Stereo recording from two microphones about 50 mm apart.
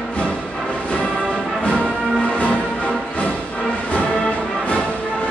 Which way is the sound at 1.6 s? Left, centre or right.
Left.